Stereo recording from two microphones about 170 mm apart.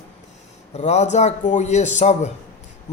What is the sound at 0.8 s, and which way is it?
A man's voice, 40° left (ahead or behind).